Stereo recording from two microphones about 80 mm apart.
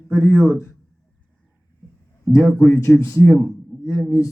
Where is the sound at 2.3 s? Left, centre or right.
Left.